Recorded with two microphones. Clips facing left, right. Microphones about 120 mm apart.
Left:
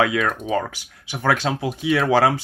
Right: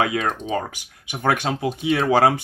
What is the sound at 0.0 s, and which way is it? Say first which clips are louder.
Speech: left 2 dB; 40° right (ahead or behind).